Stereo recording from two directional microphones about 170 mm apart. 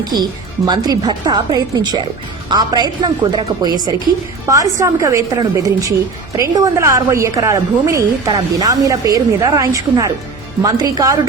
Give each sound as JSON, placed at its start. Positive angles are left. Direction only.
{"t": 0.0, "sound": "a woman's voice", "side_deg": -25}